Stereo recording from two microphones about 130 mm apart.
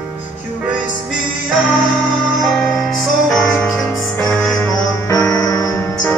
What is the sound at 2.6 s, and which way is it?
Music, centre (ahead or behind).